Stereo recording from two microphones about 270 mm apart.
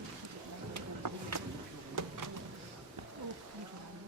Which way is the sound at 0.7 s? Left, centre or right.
Right.